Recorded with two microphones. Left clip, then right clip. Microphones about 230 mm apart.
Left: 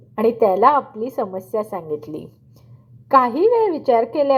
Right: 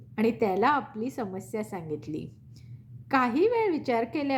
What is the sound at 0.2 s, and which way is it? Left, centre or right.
A woman's voice, right.